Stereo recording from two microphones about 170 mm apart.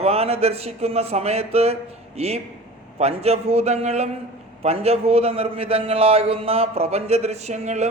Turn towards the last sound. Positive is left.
turn(degrees=-40)  # may be behind; listen again after turning